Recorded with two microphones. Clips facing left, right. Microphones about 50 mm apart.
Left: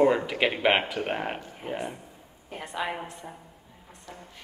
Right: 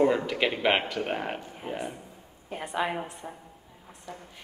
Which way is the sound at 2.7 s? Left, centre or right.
Centre.